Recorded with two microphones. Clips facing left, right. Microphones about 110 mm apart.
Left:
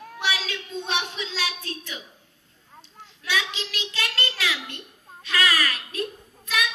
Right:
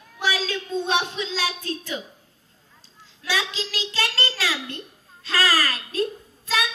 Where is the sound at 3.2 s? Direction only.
35° right (ahead or behind).